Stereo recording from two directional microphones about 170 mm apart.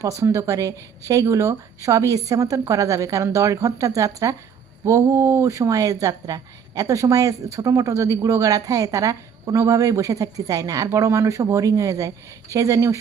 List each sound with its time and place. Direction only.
0.2 s speech: 15° right (ahead or behind)